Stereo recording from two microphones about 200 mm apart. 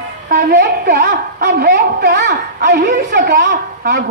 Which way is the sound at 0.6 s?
55° right (ahead or behind).